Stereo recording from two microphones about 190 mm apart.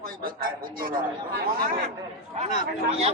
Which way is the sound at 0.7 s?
50° right (ahead or behind).